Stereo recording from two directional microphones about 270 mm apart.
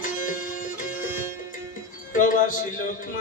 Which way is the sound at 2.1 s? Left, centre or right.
Left.